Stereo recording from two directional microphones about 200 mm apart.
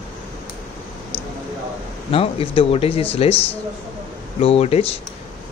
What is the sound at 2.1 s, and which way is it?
Speech, 30° left (ahead or behind).